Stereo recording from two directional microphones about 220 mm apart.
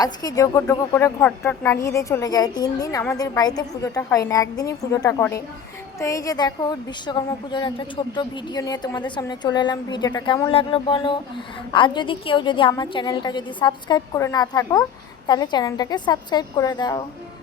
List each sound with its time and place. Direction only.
0.0 s a woman's voice: 15° left (ahead or behind)